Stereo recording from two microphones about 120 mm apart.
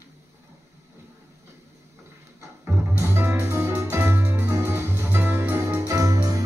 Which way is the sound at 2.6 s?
20° right (ahead or behind).